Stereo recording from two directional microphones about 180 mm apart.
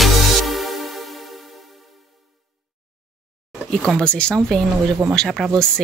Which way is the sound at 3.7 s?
5° left (ahead or behind).